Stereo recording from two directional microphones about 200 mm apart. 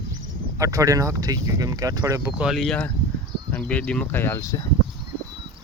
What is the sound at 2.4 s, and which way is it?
Speech, centre (ahead or behind).